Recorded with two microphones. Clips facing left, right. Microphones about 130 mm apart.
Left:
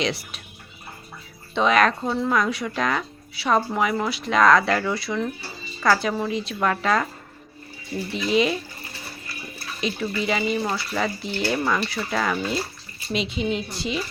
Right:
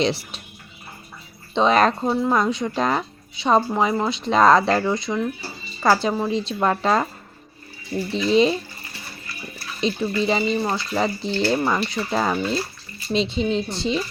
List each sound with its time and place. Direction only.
1.5 s speech: 30° right (ahead or behind)
8.1 s speech: 30° right (ahead or behind)
9.8 s speech: 30° right (ahead or behind)